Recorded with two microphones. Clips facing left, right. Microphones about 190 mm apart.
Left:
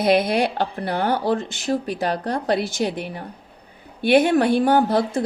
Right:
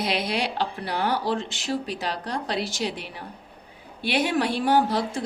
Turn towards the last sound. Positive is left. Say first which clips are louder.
# left 4 dB
turn(degrees=55)  # may be behind; listen again after turning